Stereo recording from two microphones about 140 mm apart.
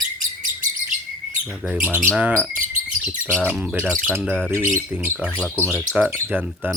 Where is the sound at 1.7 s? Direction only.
10° right (ahead or behind).